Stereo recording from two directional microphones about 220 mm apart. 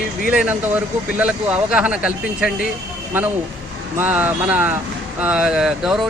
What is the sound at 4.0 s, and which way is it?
Speech, 10° right (ahead or behind).